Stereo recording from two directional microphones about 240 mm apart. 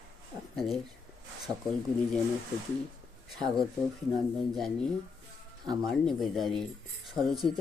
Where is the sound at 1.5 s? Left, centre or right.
Centre.